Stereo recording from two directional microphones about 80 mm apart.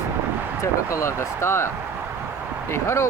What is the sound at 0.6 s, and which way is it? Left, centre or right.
Speech, left.